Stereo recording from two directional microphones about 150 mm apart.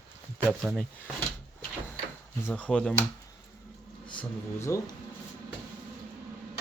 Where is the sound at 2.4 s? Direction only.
10° left (ahead or behind).